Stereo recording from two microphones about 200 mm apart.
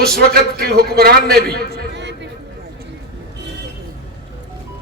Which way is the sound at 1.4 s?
50° right (ahead or behind).